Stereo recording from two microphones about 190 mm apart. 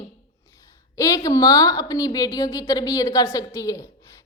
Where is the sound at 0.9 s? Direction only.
15° left (ahead or behind).